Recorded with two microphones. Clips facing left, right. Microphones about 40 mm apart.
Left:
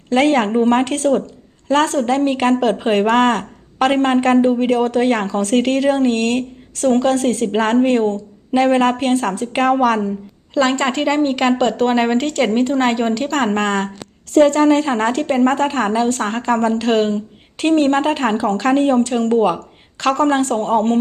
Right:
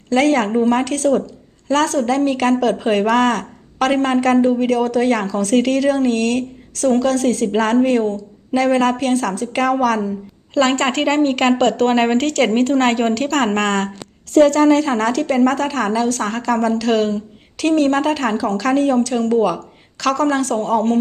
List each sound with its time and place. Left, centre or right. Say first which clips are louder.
0.1 s speech: left 1 dB; left